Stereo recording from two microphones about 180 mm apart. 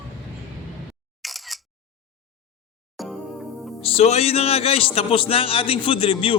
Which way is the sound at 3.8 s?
35° left (ahead or behind).